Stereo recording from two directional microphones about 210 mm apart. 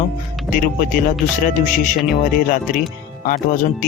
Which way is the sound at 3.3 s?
40° left (ahead or behind).